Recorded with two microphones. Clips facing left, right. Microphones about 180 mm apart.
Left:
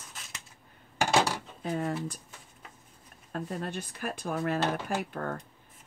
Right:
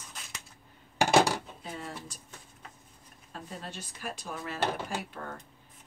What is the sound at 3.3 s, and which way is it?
Speech, 55° left (ahead or behind).